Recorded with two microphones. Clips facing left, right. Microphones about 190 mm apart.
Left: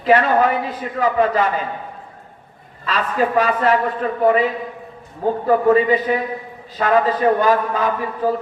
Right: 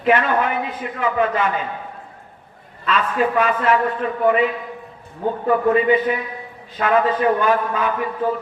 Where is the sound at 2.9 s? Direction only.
35° left (ahead or behind).